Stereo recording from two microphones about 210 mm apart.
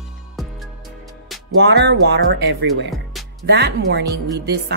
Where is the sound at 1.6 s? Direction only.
55° right (ahead or behind).